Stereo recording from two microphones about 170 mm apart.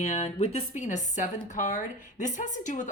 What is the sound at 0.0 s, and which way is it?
A woman's voice, 40° left (ahead or behind).